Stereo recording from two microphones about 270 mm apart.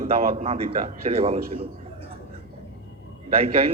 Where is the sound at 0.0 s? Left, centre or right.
Right.